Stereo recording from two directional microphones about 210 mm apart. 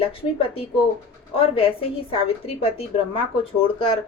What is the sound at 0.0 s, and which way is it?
A woman's voice, 25° left (ahead or behind).